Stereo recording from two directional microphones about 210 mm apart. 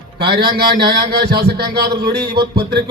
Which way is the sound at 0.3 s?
50° right (ahead or behind).